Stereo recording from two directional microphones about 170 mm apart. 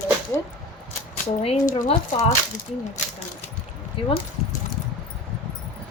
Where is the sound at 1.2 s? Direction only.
40° left (ahead or behind).